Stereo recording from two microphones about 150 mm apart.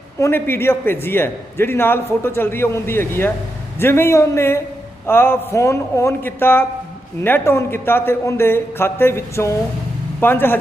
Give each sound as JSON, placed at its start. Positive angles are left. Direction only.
{"t": 0.2, "sound": "a man's voice", "side_deg": 15}